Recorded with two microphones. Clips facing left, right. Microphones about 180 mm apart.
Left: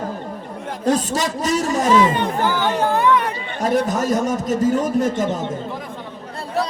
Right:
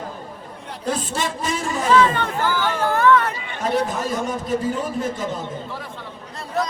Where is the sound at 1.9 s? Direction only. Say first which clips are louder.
Even; 15° left (ahead or behind).